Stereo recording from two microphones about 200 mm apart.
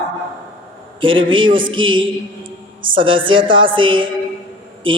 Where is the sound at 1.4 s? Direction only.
25° right (ahead or behind).